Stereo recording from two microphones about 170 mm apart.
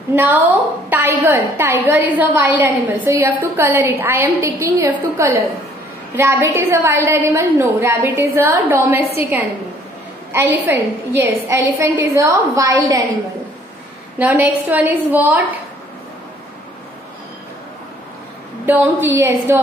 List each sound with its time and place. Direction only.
0.1 s a woman's voice: 10° right (ahead or behind)
10.3 s a woman's voice: 15° right (ahead or behind)
14.1 s a woman's voice: 10° right (ahead or behind)
18.7 s a woman's voice: 10° right (ahead or behind)